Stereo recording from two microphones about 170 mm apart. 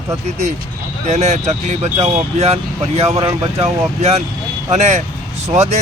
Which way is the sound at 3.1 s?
20° right (ahead or behind).